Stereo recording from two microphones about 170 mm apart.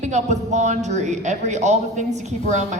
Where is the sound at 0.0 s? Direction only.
45° right (ahead or behind).